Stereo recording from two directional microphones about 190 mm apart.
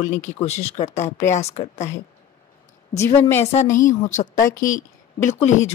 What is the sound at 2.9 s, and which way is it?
A woman's voice, 15° left (ahead or behind).